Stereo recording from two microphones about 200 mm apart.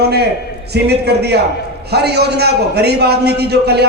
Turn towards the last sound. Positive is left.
turn(degrees=-55)  # may be behind; listen again after turning